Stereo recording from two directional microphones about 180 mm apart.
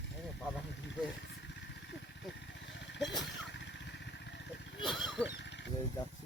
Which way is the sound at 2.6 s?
85° left.